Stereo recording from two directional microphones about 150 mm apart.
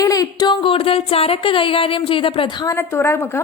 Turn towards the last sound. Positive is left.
turn(degrees=15)  # may be behind; listen again after turning